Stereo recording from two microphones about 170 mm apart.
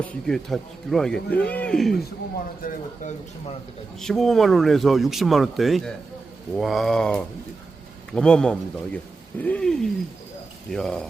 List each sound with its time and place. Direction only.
0.0 s speech: 5° left (ahead or behind)
2.6 s speech: 55° left (ahead or behind)
4.0 s speech: centre (ahead or behind)